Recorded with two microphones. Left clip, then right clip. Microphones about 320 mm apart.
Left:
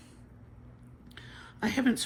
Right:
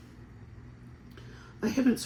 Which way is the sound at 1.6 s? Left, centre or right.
Left.